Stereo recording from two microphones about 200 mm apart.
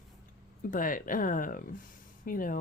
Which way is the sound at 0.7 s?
45° left (ahead or behind).